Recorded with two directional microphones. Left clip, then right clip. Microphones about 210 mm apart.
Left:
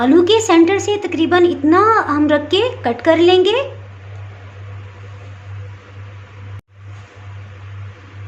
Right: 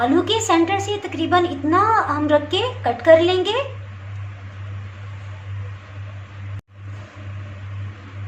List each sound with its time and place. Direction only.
0.0 s speech: 55° left (ahead or behind)